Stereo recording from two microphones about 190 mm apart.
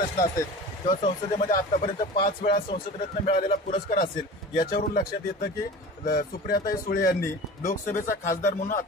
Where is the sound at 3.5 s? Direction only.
50° left (ahead or behind).